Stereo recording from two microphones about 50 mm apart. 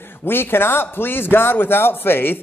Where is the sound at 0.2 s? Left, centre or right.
Left.